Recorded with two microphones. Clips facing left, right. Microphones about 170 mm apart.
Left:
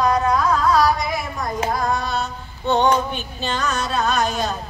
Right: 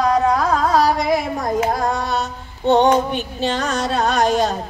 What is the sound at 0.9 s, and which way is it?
Child singing, 45° right (ahead or behind).